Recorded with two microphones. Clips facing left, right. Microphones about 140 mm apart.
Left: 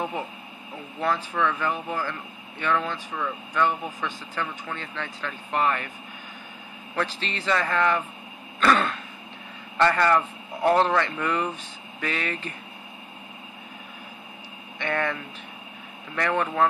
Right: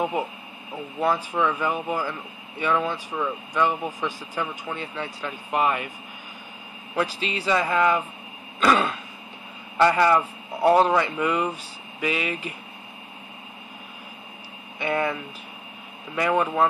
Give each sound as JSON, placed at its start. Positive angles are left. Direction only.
{"t": 1.0, "sound": "speech", "side_deg": -15}
{"t": 7.0, "sound": "speech", "side_deg": -10}
{"t": 8.5, "sound": "throat clearing", "side_deg": -10}
{"t": 9.8, "sound": "speech", "side_deg": -10}
{"t": 14.8, "sound": "speech", "side_deg": -10}
{"t": 16.2, "sound": "speech", "side_deg": -10}